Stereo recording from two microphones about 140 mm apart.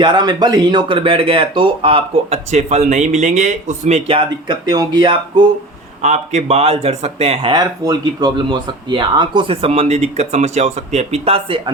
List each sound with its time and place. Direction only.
0.0 s speech: 35° right (ahead or behind); by 4.2 s 50° right (ahead or behind)
4.3 s speech: 30° right (ahead or behind)
6.0 s speech: 55° right (ahead or behind)
7.5 s speech: 30° right (ahead or behind)